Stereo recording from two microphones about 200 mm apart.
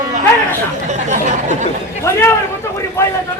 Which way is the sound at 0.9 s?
35° right (ahead or behind).